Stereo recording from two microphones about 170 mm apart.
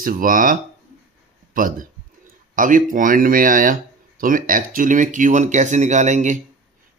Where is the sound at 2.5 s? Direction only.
50° right (ahead or behind).